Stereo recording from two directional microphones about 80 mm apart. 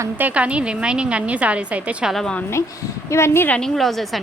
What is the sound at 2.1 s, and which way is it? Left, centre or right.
Speech, centre.